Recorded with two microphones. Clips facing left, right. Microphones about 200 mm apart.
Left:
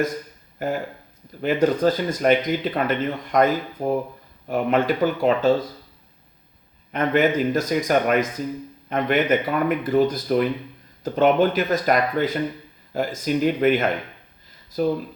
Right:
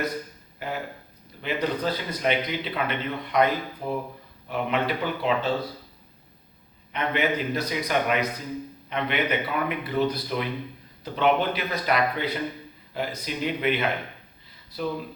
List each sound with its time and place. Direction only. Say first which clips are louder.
0.6 s speech: left 6 dB; 45° left (ahead or behind)
6.9 s speech: left 7 dB; 45° left (ahead or behind)